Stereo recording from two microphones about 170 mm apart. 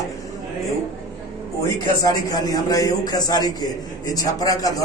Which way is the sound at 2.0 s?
20° left (ahead or behind).